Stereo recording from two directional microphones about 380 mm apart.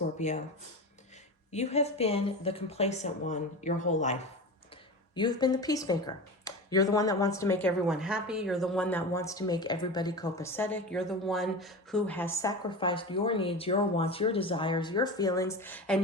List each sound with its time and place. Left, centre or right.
0.2 s speech: centre
1.5 s speech: centre